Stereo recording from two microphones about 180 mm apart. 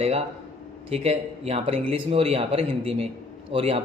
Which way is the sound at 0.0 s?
35° right (ahead or behind).